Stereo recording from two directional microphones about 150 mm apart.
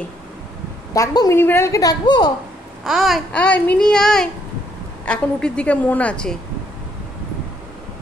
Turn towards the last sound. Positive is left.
turn(degrees=5)  # may be behind; listen again after turning